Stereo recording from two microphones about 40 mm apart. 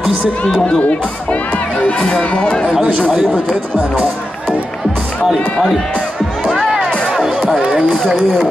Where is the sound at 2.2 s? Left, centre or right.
Left.